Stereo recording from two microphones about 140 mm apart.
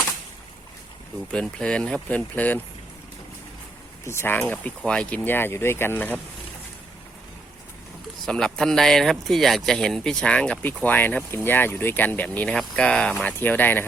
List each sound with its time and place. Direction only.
1.3 s speech: 5° left (ahead or behind)
4.0 s speech: 20° left (ahead or behind)
8.2 s speech: 5° left (ahead or behind)